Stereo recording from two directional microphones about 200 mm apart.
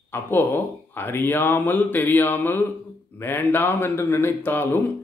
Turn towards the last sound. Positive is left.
turn(degrees=10)  # may be behind; listen again after turning